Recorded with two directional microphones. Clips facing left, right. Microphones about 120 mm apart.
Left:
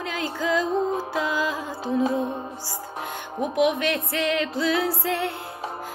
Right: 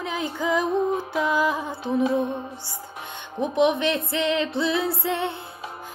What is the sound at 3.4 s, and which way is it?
Music, 25° right (ahead or behind).